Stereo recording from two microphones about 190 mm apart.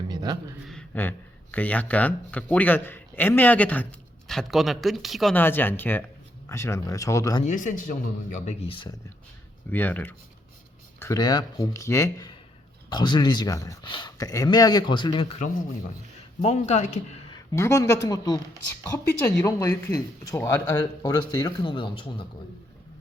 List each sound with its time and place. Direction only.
0.1 s a sound: 20° right (ahead or behind)
0.7 s speech: 5° left (ahead or behind)
5.4 s speech: 10° left (ahead or behind)
7.4 s a man's voice: 40° left (ahead or behind)
9.7 s speech: 10° left (ahead or behind); by 15.4 s 30° left (ahead or behind)
16.4 s a man's voice: 35° left (ahead or behind)
17.3 s speech: 15° left (ahead or behind)